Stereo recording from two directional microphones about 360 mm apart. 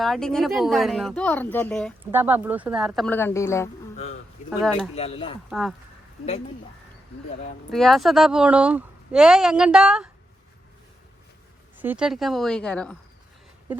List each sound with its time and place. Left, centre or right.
0.0 s speech: centre
3.9 s a sound: centre
4.9 s speech: centre
5.5 s speech: centre
7.7 s speech: centre
11.8 s speech: centre